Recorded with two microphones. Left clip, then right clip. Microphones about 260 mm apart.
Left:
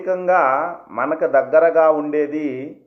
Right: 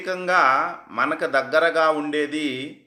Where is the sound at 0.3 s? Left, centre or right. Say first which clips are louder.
Left 1 dB; right.